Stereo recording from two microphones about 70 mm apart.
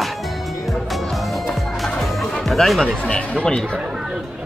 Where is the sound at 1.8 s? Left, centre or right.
Centre.